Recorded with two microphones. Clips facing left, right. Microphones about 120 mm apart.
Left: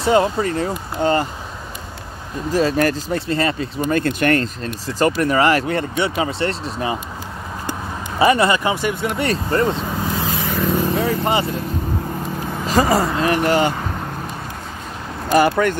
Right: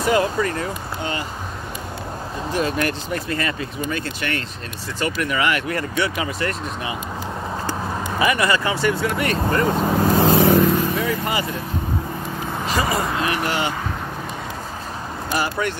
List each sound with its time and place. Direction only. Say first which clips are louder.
0.0 s speech: left 3 dB; 25° left (ahead or behind)
1.0 s speech: left 11 dB; 45° left (ahead or behind)
2.5 s speech: left 5 dB; 35° left (ahead or behind)
3.9 s speech: left 13 dB; 45° left (ahead or behind)
8.2 s speech: left 5 dB; 30° left (ahead or behind)
9.8 s vehicle: right 6 dB; 65° right (ahead or behind)
11.0 s vehicle: left 4 dB; 30° left (ahead or behind)
12.6 s speech: left 6 dB; 40° left (ahead or behind)
15.3 s speech: left 9 dB; 55° left (ahead or behind)